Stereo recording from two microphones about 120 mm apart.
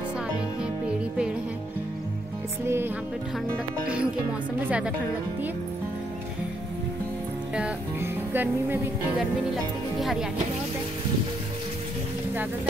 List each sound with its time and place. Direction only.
0.8 s music: 10° right (ahead or behind)
2.6 s music: 20° right (ahead or behind)
3.8 s speech: 10° right (ahead or behind)
8.0 s music: 20° right (ahead or behind)